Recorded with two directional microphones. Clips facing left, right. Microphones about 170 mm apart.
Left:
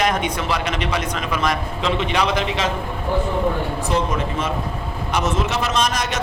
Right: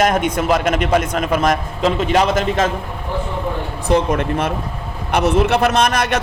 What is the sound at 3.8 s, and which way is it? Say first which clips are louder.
A man's voice: right 8 dB; 65° right (ahead or behind).